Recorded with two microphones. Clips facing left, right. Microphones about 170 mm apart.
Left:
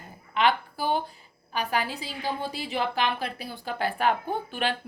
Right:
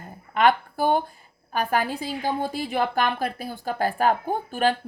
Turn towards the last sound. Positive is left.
turn(degrees=-45)  # may be behind; listen again after turning